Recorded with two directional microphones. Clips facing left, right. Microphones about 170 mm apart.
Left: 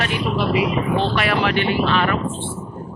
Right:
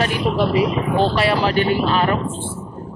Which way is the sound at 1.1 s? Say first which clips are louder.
Right 2 dB; 30° right (ahead or behind).